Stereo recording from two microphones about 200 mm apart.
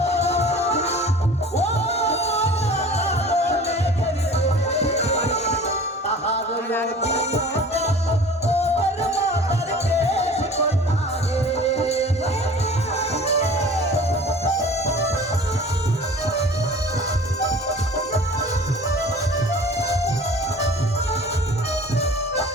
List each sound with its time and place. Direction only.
0.0 s music: 30° left (ahead or behind)
7.0 s music: 30° left (ahead or behind)